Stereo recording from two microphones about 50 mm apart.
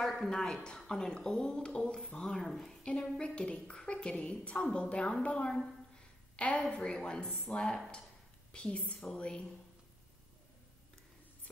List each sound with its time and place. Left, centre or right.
0.2 s a woman's voice: centre
5.9 s a sound: left
6.7 s a woman's voice: left
8.5 s a woman's voice: left